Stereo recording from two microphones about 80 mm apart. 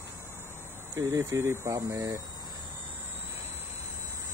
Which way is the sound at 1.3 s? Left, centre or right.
Right.